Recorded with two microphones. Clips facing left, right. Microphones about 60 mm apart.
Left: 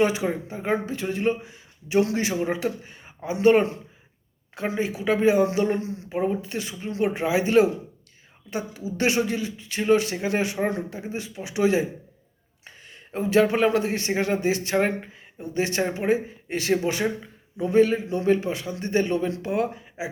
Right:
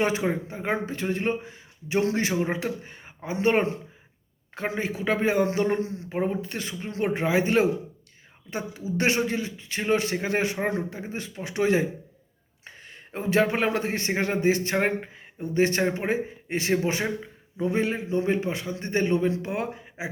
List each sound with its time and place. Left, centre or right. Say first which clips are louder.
0.0 s a man's voice: left 2 dB; right
12.6 s a sound: right 1 dB; right
13.1 s a man's voice: left 3 dB; right